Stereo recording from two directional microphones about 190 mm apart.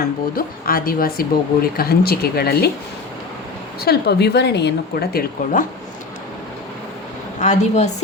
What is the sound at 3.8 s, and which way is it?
Speech, 60° left (ahead or behind).